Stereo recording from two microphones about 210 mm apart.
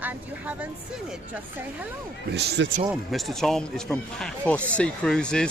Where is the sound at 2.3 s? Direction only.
55° right (ahead or behind).